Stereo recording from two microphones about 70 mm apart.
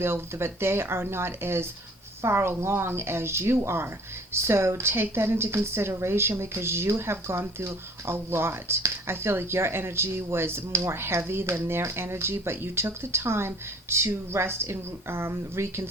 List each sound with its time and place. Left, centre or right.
0.0 s a woman's voice: right